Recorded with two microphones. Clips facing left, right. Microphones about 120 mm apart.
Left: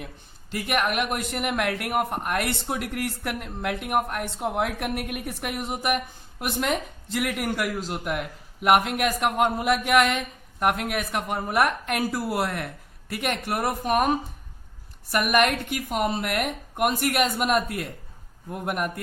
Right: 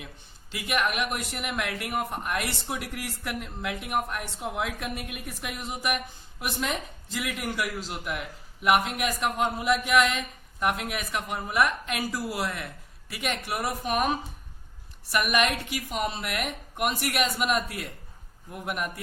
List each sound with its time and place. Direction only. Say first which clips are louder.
0.5 s speech: left 3 dB; 50° left (ahead or behind)
15.1 s speech: left 4 dB; 50° left (ahead or behind)